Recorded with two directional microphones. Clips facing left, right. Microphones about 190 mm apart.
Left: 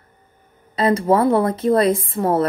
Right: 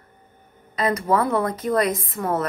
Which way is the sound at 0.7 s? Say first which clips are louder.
Left 5 dB; 30° left (ahead or behind).